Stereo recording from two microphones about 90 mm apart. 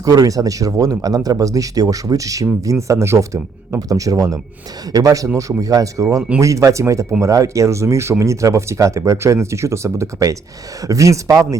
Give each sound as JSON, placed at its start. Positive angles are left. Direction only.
{"t": 0.0, "sound": "speech", "side_deg": -45}